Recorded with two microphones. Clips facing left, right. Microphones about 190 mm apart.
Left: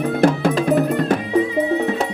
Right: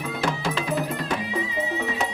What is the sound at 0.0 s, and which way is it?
Music, 55° left (ahead or behind).